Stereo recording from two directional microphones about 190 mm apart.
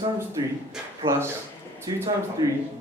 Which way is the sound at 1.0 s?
30° right (ahead or behind).